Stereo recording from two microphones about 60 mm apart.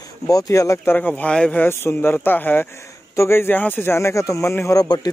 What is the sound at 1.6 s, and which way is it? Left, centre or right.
Speech, left.